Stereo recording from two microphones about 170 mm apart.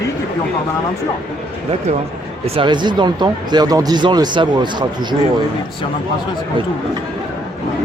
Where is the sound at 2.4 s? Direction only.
30° right (ahead or behind).